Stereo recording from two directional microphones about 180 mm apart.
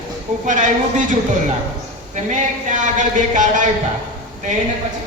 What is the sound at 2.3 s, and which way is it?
Speech, 45° right (ahead or behind).